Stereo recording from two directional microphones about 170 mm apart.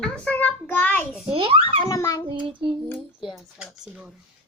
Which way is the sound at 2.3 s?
30° right (ahead or behind).